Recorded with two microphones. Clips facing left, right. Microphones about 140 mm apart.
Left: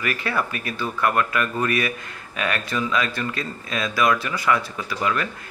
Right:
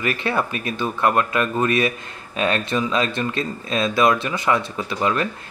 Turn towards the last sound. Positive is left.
turn(degrees=-25)  # may be behind; listen again after turning